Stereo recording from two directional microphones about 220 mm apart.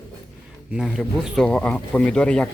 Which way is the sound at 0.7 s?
Centre (ahead or behind).